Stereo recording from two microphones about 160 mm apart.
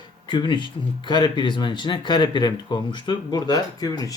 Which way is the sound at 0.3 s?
30° left (ahead or behind).